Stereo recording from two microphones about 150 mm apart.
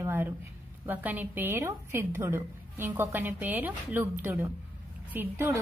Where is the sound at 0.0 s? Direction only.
15° right (ahead or behind).